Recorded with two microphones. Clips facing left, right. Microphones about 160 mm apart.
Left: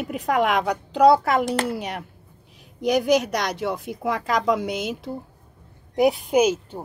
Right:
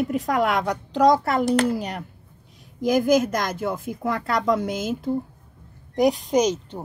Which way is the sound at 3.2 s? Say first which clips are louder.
Right 2 dB; 75° left (ahead or behind).